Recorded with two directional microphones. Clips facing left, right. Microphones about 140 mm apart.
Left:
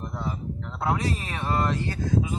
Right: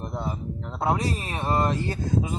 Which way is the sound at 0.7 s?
25° right (ahead or behind).